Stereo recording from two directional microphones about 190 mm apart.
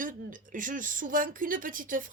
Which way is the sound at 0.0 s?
45° right (ahead or behind).